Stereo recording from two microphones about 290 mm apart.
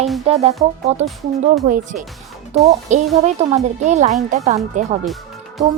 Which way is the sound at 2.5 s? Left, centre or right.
Right.